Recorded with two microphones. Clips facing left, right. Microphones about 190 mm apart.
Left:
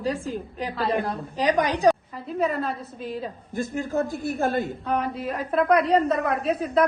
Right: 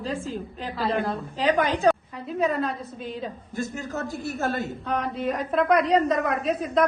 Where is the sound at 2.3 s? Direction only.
Centre (ahead or behind).